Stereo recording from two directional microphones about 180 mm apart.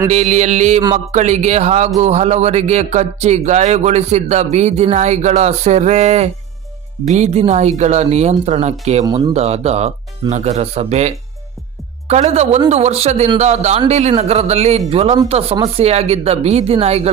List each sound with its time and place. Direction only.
0.1 s speech: 40° right (ahead or behind)